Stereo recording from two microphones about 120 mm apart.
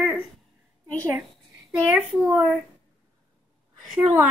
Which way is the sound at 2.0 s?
15° right (ahead or behind).